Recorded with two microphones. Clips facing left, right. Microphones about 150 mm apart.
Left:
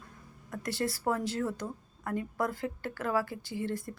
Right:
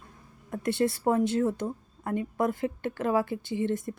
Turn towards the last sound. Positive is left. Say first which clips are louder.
# right 6 dB
turn(degrees=-20)  # may be behind; listen again after turning